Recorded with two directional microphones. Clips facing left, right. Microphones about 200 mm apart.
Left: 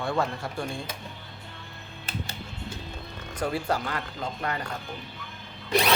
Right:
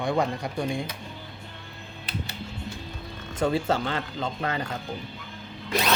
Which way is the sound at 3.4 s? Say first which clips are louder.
Right 4 dB; 25° right (ahead or behind).